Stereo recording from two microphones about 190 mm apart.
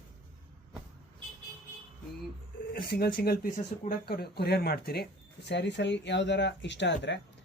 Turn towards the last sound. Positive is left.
turn(degrees=70)  # may be behind; listen again after turning